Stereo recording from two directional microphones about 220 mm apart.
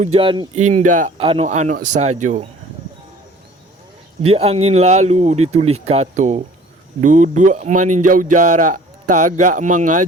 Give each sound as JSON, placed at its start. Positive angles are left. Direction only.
{"t": 0.0, "sound": "speech", "side_deg": -25}
{"t": 4.2, "sound": "speech", "side_deg": -25}